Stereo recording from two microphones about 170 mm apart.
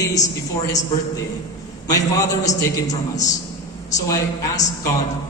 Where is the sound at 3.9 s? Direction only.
20° left (ahead or behind).